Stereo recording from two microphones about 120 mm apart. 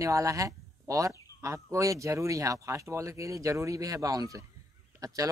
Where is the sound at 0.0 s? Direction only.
25° right (ahead or behind).